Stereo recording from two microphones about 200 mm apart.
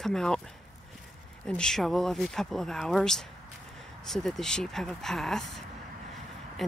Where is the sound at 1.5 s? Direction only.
5° left (ahead or behind).